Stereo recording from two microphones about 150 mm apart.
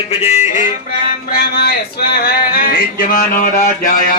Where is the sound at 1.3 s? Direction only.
90° left; by 4.2 s 65° left (ahead or behind).